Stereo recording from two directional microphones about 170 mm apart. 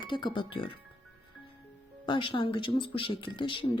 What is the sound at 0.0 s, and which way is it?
Speech, 30° left (ahead or behind).